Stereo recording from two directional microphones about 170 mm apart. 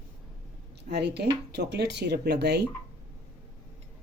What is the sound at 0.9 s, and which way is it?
Speech, 80° right.